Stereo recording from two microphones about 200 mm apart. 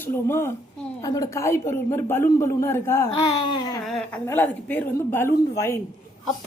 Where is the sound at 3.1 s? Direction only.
25° left (ahead or behind).